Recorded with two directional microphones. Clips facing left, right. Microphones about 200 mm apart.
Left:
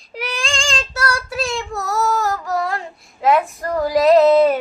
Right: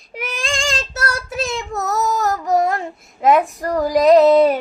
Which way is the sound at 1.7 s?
20° right (ahead or behind).